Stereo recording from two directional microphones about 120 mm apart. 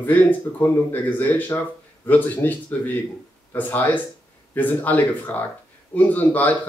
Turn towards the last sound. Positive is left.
turn(degrees=15)  # may be behind; listen again after turning